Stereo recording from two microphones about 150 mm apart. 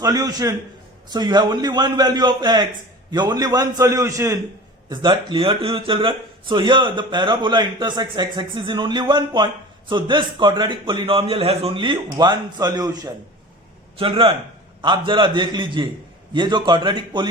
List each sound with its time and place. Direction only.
0.0 s a man's voice: 25° right (ahead or behind)
4.9 s speech: 30° right (ahead or behind)
14.0 s speech: 35° right (ahead or behind)